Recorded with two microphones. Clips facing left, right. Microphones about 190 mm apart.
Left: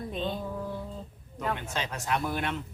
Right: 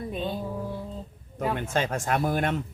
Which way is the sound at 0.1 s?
10° right (ahead or behind).